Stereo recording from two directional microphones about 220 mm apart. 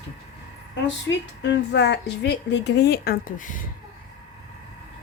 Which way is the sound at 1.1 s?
55° left (ahead or behind).